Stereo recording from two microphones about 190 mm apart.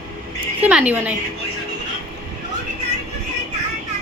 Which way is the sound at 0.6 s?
5° right (ahead or behind).